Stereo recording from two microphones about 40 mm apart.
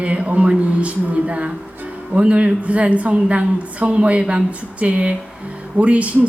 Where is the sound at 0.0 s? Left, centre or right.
Right.